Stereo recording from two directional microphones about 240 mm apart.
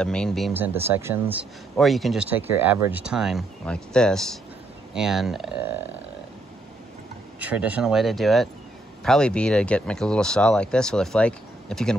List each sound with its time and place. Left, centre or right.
0.0 s speech: centre
7.3 s speech: centre